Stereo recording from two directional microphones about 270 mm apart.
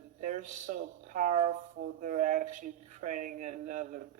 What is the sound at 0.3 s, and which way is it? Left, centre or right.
Speech, right.